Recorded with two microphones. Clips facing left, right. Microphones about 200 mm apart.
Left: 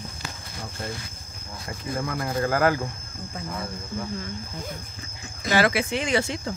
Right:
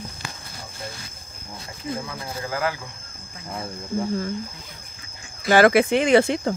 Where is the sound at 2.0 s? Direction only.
55° left (ahead or behind).